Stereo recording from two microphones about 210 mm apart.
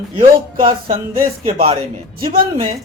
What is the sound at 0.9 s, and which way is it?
Speech, 30° right (ahead or behind).